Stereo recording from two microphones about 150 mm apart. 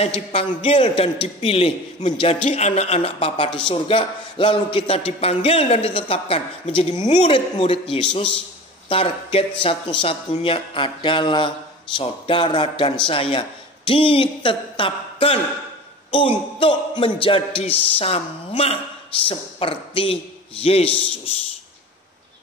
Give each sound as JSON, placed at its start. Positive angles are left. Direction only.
{"t": 0.0, "sound": "a man's voice", "side_deg": 40}